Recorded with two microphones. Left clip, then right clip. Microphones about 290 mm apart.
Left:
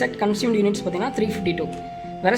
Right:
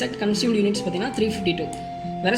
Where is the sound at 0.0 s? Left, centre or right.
Left.